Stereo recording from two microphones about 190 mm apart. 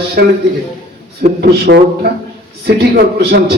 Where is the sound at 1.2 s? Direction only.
60° right (ahead or behind).